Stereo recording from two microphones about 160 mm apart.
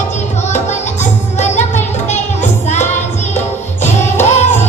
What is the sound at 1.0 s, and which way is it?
Music, 45° left (ahead or behind).